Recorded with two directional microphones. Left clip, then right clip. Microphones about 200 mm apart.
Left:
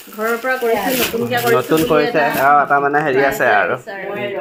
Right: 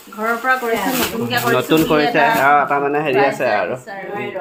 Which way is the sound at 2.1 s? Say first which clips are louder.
Right 2 dB; 10° right (ahead or behind).